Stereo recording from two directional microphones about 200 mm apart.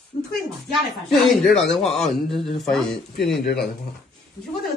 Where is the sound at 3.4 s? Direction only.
50° left (ahead or behind).